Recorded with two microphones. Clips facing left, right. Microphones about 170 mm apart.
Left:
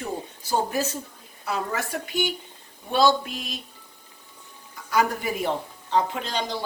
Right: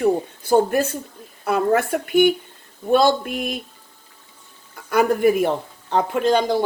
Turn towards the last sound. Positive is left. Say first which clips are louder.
# right 11 dB
turn(degrees=-55)  # may be behind; listen again after turning